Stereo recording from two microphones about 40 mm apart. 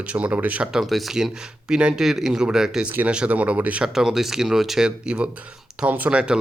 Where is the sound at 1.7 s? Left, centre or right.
Right.